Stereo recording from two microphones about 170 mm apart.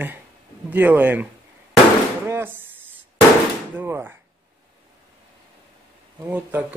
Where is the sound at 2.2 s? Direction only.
10° right (ahead or behind).